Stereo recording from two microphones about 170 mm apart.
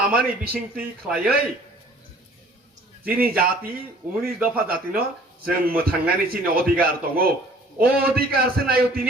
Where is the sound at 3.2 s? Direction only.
60° right (ahead or behind).